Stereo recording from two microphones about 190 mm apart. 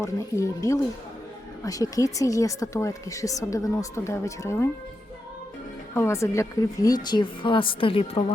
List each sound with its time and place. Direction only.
0.0 s a woman's voice: 15° left (ahead or behind)
5.9 s a woman's voice: 15° left (ahead or behind)